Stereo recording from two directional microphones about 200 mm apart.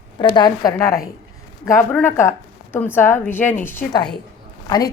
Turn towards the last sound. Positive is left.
turn(degrees=20)  # may be behind; listen again after turning